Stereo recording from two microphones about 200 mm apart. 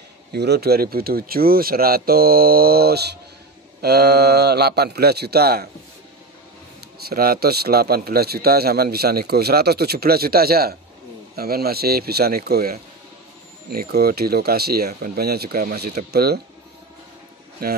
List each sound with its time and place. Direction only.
0.3 s a man's voice: 55° right (ahead or behind)
7.1 s a man's voice: 50° right (ahead or behind)
17.6 s a man's voice: 45° right (ahead or behind)